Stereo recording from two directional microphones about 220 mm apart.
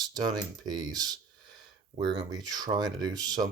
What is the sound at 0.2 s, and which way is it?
Speech, 20° right (ahead or behind).